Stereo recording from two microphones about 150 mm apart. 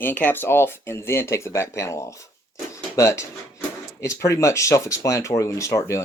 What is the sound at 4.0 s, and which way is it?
Speech, 20° left (ahead or behind).